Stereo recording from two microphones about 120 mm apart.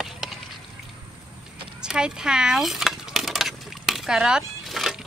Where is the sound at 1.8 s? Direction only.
5° right (ahead or behind).